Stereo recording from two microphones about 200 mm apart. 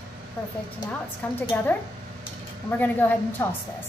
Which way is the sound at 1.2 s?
5° left (ahead or behind).